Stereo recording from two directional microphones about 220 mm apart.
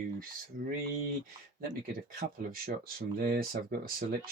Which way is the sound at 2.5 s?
40° right (ahead or behind).